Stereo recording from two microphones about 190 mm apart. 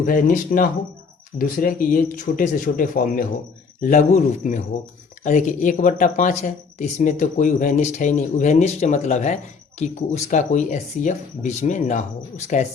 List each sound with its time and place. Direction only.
0.0 s speech: 45° left (ahead or behind)